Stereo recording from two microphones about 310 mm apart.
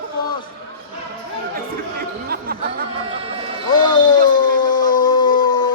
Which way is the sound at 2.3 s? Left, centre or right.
Right.